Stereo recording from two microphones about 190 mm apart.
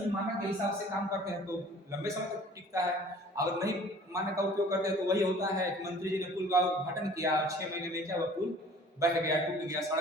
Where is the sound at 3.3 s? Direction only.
15° right (ahead or behind).